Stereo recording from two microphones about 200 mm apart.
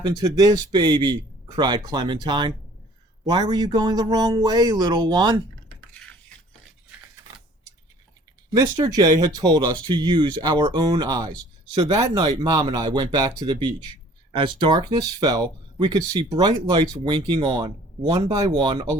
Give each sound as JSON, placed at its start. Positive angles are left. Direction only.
{"t": 0.0, "sound": "speech", "side_deg": -20}
{"t": 8.5, "sound": "speech", "side_deg": -20}